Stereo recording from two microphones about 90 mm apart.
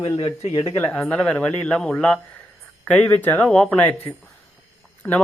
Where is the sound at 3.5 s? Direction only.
5° left (ahead or behind).